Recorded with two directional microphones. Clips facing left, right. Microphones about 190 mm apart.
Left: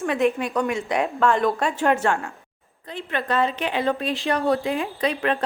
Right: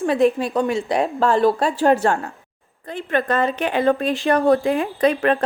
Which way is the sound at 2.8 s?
50° right (ahead or behind).